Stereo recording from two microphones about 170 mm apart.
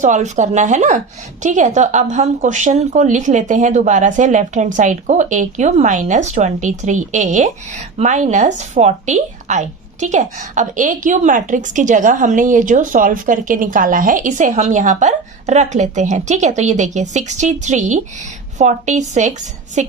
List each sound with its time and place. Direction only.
0.0 s a woman's voice: 45° right (ahead or behind)